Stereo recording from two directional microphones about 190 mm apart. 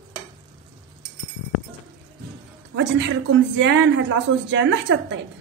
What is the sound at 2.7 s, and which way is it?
Speech, 70° right (ahead or behind).